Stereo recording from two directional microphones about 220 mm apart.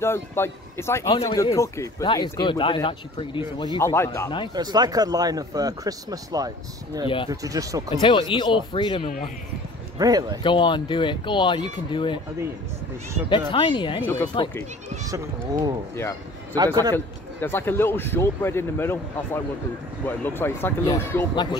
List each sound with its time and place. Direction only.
0.0 s speech: 10° left (ahead or behind)
3.7 s speech: 10° left (ahead or behind)
4.6 s speech: 20° right (ahead or behind)
8.0 s speech: 20° left (ahead or behind)
9.9 s speech: 15° right (ahead or behind)
10.4 s speech: 20° left (ahead or behind)
13.5 s speech: 20° left (ahead or behind)
15.0 s speech: 15° right (ahead or behind)
16.9 s speech: 10° left (ahead or behind)